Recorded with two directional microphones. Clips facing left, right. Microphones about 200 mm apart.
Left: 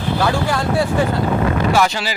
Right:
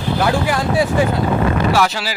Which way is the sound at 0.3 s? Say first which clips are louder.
Right 1 dB; 15° right (ahead or behind).